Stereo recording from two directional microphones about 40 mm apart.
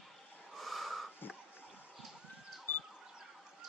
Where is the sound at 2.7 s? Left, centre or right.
Left.